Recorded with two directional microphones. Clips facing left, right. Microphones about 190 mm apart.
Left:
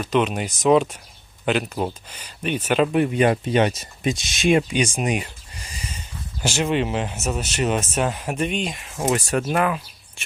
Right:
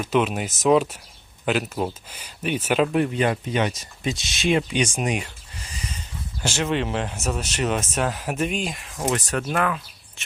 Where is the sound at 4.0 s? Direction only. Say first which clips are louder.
Left 4 dB; 15° left (ahead or behind).